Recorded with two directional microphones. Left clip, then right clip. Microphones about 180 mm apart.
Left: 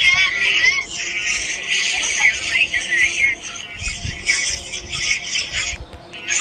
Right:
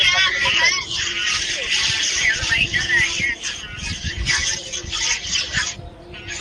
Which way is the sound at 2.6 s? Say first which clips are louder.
Left 1 dB; 65° right (ahead or behind).